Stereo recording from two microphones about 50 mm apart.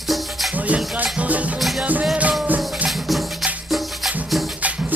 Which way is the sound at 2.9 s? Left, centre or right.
Centre.